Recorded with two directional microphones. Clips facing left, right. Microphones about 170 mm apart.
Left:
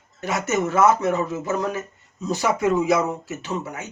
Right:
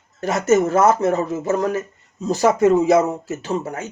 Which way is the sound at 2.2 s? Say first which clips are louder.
Right 6 dB; 40° right (ahead or behind).